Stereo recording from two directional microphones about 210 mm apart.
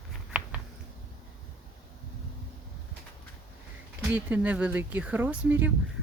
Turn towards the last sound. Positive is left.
turn(degrees=-10)  # may be behind; listen again after turning